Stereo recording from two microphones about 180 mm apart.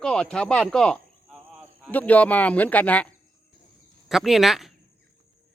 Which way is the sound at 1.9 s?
10° left (ahead or behind).